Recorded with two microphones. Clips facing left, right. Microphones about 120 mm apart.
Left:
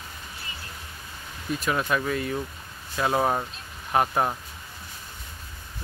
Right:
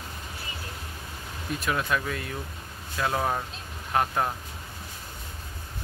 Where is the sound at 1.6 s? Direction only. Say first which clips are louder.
Left 2 dB; centre (ahead or behind); by 4.4 s 20° left (ahead or behind).